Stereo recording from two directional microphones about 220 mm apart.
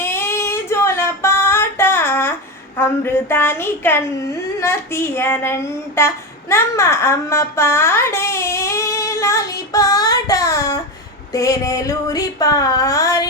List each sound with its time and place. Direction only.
0.0 s female singing: 10° left (ahead or behind)
4.6 s speech: 10° left (ahead or behind)
11.3 s female singing: 15° left (ahead or behind)